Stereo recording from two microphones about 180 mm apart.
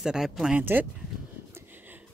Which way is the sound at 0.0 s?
5° right (ahead or behind).